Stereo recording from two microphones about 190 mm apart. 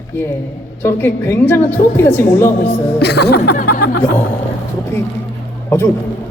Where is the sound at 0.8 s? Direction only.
10° left (ahead or behind).